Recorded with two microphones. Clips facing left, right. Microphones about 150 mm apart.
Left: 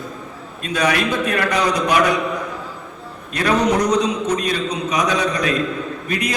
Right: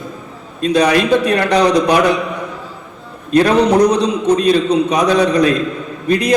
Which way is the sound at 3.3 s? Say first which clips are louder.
Right 7 dB; 35° right (ahead or behind).